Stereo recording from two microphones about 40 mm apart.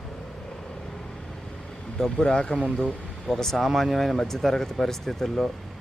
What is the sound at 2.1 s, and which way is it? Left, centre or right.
Speech, left.